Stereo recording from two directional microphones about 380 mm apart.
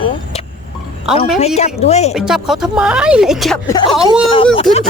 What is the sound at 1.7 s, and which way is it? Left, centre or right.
Speech, centre.